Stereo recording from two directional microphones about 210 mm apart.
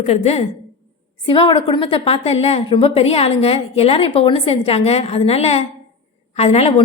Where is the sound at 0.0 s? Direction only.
30° left (ahead or behind).